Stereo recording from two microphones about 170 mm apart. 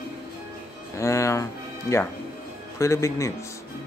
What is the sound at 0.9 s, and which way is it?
Speech, 15° left (ahead or behind).